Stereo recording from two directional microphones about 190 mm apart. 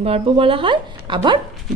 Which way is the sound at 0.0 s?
30° right (ahead or behind).